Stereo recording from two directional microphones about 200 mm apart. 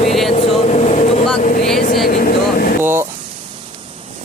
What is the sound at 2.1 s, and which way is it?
Vehicle, 45° left (ahead or behind).